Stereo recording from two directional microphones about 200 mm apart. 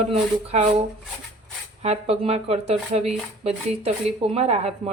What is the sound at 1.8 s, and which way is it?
Speech, 35° right (ahead or behind).